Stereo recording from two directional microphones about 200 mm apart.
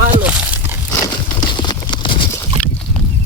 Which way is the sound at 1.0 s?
20° left (ahead or behind).